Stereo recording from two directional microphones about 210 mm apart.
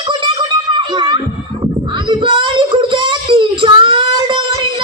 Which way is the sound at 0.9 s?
20° right (ahead or behind).